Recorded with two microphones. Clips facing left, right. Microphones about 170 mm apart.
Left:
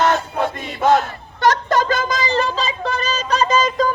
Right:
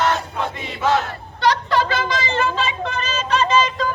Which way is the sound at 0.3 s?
50° left (ahead or behind).